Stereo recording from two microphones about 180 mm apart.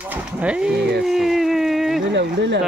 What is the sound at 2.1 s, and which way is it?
Speech, 75° right (ahead or behind).